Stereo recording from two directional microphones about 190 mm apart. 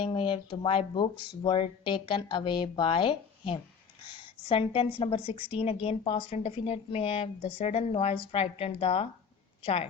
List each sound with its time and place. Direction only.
0.0 s a woman's voice: 25° left (ahead or behind)